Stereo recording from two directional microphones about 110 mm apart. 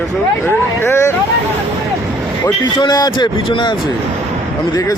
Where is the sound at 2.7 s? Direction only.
40° left (ahead or behind).